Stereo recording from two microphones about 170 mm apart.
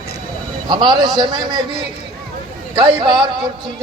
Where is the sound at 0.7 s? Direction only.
25° right (ahead or behind).